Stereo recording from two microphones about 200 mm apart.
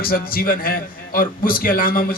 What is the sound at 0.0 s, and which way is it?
A man's voice, 45° left (ahead or behind).